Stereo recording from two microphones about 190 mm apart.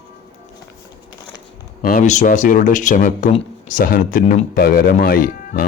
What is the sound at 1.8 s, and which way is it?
Speech, 45° left (ahead or behind).